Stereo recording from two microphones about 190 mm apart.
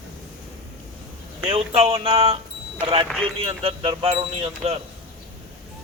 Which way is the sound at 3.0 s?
5° left (ahead or behind).